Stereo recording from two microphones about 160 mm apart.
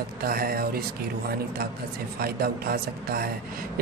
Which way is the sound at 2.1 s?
75° right (ahead or behind).